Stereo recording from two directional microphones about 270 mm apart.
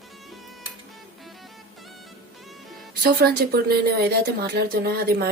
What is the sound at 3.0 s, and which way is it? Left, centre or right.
A woman's voice, right.